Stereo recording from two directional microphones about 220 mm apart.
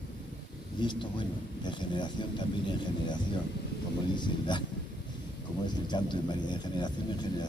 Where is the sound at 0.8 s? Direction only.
20° left (ahead or behind).